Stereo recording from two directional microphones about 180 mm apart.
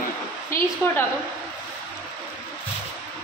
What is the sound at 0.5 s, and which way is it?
Speech, 15° left (ahead or behind).